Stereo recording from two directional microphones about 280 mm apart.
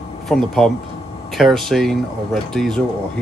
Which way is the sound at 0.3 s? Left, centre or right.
Centre.